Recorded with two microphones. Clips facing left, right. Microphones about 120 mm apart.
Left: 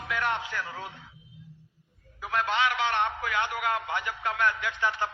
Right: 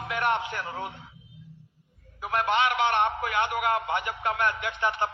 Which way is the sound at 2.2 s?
55° right (ahead or behind).